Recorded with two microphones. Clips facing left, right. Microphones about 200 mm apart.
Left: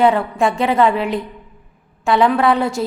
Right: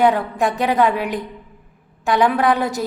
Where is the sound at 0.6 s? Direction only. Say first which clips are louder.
Left 2 dB; centre (ahead or behind).